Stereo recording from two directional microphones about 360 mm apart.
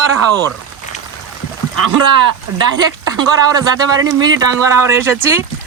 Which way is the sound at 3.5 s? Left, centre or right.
Centre.